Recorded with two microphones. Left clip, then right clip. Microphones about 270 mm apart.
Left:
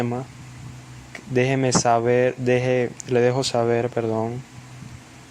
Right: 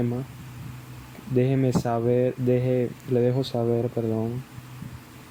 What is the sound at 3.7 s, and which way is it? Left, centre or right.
Speech, left.